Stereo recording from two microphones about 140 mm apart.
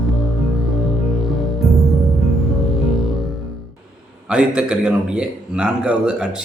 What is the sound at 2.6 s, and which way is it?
Music, centre (ahead or behind).